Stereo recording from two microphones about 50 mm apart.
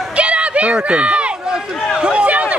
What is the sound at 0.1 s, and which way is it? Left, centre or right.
Run, right.